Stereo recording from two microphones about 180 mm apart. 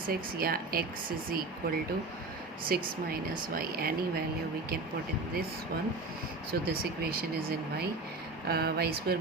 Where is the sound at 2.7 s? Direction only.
55° right (ahead or behind).